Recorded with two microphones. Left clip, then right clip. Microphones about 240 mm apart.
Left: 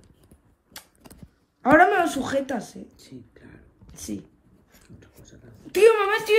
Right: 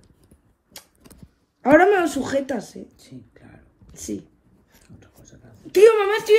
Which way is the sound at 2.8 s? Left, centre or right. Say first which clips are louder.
Right 1 dB; centre.